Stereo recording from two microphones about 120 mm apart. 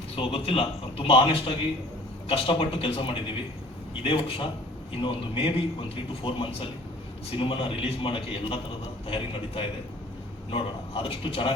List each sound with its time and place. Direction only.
0.2 s a man's voice: 50° left (ahead or behind)